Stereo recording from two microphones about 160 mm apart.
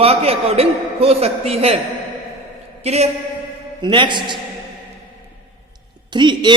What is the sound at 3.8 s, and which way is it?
Speech, 30° right (ahead or behind).